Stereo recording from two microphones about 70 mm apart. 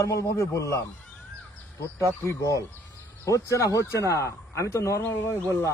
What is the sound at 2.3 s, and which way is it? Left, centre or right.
Speech, left.